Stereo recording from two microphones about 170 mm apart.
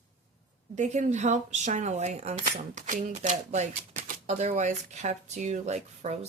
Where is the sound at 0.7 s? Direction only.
45° right (ahead or behind).